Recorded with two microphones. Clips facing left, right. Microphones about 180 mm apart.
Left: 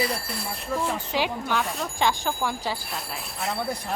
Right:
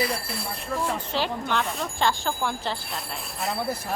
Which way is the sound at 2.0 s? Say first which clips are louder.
Left 1 dB; 15° left (ahead or behind).